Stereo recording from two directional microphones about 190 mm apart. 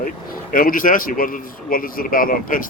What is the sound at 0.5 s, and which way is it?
A man's voice, 45° left (ahead or behind).